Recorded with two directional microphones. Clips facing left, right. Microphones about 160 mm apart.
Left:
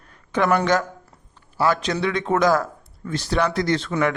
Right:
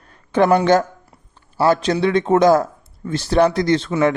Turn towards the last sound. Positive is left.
turn(degrees=-25)  # may be behind; listen again after turning